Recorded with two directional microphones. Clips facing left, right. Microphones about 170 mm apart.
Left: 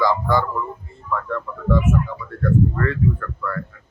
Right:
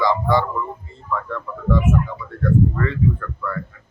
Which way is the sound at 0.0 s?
5° left (ahead or behind).